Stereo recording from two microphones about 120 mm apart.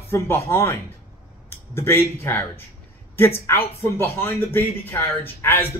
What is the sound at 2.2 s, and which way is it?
Speech, 15° left (ahead or behind).